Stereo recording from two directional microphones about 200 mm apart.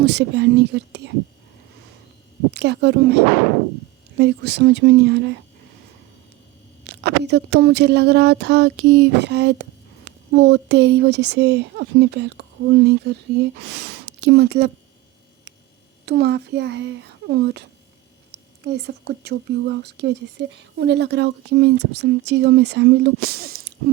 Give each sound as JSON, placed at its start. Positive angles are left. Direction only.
{"t": 0.0, "sound": "speech", "side_deg": -60}
{"t": 2.5, "sound": "speech", "side_deg": -60}
{"t": 6.8, "sound": "speech", "side_deg": -60}
{"t": 16.0, "sound": "speech", "side_deg": -55}